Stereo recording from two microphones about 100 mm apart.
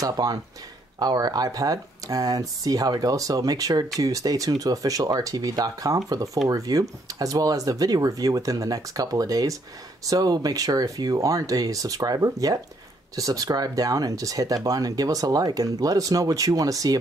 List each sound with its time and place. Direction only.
0.0 s speech: 40° right (ahead or behind)